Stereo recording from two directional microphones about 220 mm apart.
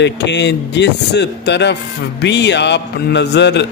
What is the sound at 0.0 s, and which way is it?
Speech, 50° left (ahead or behind).